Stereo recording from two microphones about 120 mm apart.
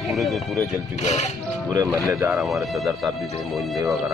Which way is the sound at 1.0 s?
75° left (ahead or behind).